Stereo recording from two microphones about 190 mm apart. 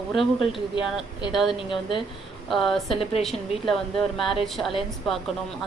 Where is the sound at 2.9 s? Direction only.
30° left (ahead or behind).